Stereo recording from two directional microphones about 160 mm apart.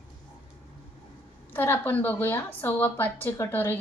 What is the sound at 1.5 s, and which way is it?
A woman's voice, 15° left (ahead or behind).